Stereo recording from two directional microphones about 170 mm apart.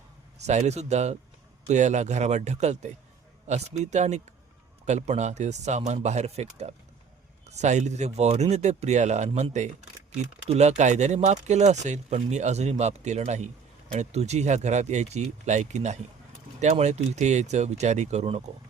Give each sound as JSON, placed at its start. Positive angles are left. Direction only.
{"t": 0.3, "sound": "speech", "side_deg": -40}